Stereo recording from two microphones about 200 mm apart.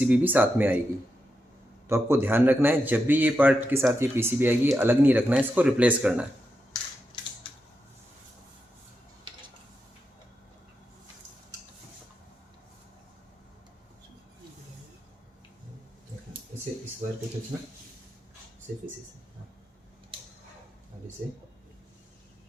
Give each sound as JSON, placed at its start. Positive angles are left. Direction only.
{"t": 0.0, "sound": "speech", "side_deg": -5}
{"t": 1.9, "sound": "speech", "side_deg": -10}
{"t": 7.1, "sound": "a sound", "side_deg": 25}